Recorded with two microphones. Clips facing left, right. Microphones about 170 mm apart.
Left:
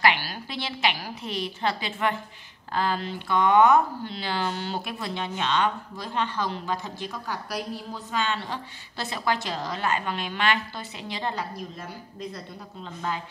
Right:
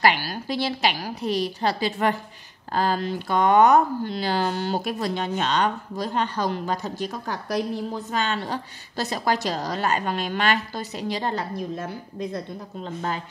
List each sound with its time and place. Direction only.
0.0 s a woman's voice: 40° right (ahead or behind)